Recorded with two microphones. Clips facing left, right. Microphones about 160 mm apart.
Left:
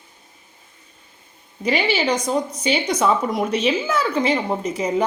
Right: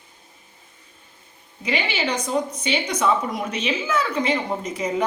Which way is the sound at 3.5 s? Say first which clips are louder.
Left 2 dB; 35° left (ahead or behind).